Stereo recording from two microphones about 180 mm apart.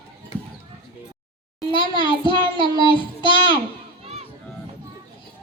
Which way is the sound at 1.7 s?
25° left (ahead or behind).